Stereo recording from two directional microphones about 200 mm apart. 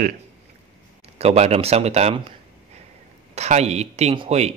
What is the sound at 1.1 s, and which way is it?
Speech, 30° right (ahead or behind).